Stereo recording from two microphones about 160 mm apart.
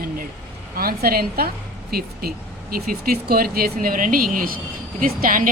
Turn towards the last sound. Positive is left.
turn(degrees=-60)  # may be behind; listen again after turning